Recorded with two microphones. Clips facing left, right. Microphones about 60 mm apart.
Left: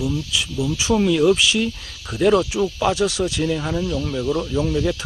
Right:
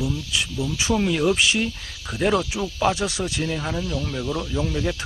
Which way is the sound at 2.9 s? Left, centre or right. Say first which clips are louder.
Left 6 dB; right.